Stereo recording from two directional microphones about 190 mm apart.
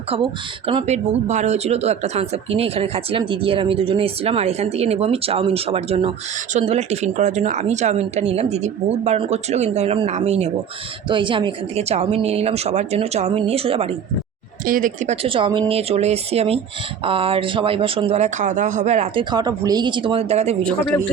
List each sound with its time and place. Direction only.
0.7 s speech: 30° right (ahead or behind)
14.7 s speech: 45° right (ahead or behind)
19.3 s speech: 20° right (ahead or behind)